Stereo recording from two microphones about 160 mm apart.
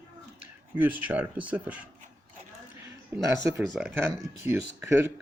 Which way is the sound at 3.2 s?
20° right (ahead or behind).